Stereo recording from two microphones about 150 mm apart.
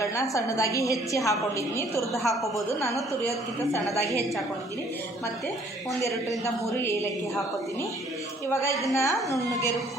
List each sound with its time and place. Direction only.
0.0 s a woman's voice: 20° left (ahead or behind)
2.2 s a woman's voice: centre (ahead or behind)
6.0 s a woman's voice: 20° left (ahead or behind)
9.0 s a woman's voice: 20° left (ahead or behind)